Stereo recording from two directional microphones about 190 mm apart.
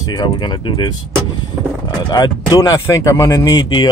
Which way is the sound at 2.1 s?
20° left (ahead or behind).